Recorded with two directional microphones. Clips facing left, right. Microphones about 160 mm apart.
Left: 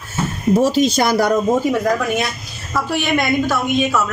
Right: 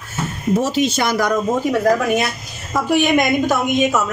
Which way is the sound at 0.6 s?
35° left (ahead or behind).